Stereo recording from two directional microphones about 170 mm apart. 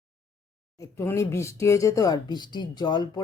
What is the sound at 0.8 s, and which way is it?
Speech, 15° left (ahead or behind).